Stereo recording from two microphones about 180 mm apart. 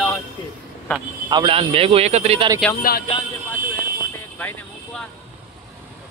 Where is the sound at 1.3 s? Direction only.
30° right (ahead or behind).